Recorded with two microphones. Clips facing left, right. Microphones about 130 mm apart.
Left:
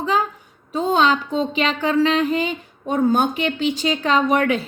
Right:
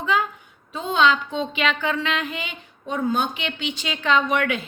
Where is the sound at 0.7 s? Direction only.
40° left (ahead or behind).